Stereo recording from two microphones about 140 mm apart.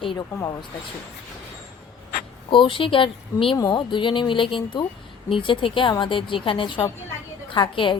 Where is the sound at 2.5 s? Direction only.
35° left (ahead or behind).